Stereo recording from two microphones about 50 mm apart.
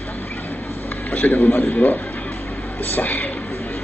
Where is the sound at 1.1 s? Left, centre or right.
Left.